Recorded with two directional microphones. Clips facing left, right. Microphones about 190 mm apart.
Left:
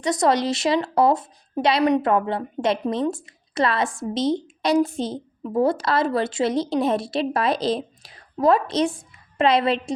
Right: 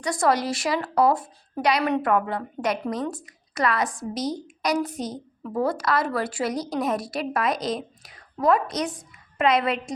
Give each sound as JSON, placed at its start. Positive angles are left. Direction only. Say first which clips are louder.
{"t": 0.0, "sound": "speech", "louder": "left 3 dB", "side_deg": 20}